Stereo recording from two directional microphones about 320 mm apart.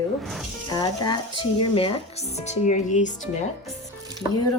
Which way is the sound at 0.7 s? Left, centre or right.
Centre.